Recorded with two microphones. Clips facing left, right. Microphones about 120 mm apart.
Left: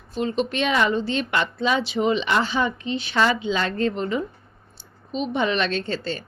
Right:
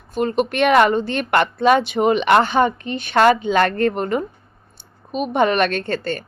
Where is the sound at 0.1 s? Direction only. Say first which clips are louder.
Right 4 dB; 55° right (ahead or behind).